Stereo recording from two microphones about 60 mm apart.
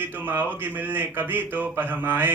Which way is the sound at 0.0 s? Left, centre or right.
Right.